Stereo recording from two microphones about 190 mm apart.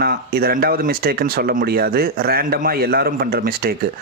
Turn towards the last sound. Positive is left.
turn(degrees=-50)  # may be behind; listen again after turning